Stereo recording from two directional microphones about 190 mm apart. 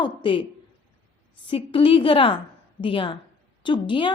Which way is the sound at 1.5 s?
25° left (ahead or behind).